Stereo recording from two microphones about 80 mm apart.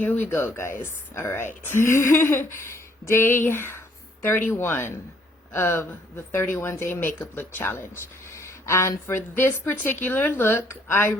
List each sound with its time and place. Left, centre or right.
0.0 s speech: left
0.3 s a woman's voice: left
8.3 s a woman's voice: left